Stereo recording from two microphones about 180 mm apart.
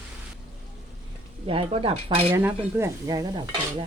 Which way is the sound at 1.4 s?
30° right (ahead or behind).